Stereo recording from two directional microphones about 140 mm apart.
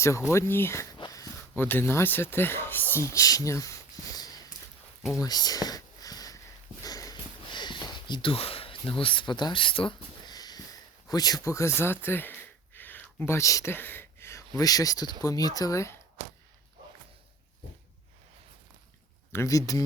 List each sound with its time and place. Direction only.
0.0 s speech: 20° left (ahead or behind)
0.9 s a sound: 25° left (ahead or behind)
6.8 s sniff: 25° left (ahead or behind)
11.1 s speech: 30° left (ahead or behind)
19.3 s speech: 20° left (ahead or behind)